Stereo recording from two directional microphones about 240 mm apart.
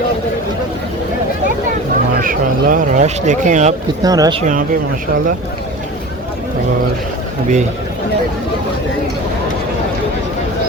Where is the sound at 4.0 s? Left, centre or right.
Centre.